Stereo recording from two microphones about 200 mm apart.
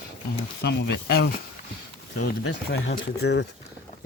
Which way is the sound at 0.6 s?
55° left (ahead or behind).